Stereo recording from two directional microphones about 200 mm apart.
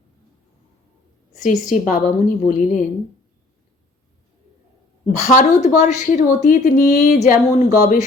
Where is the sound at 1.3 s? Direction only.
40° left (ahead or behind).